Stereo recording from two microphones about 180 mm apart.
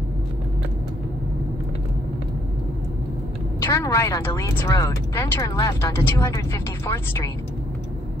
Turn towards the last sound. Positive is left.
turn(degrees=15)  # may be behind; listen again after turning